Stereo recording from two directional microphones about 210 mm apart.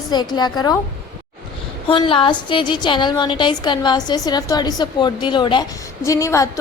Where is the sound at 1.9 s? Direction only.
25° left (ahead or behind).